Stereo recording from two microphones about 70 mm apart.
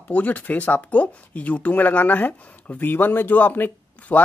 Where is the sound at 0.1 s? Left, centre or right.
Left.